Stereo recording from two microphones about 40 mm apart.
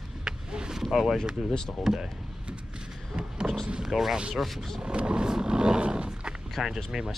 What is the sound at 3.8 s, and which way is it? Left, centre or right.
Speech, centre.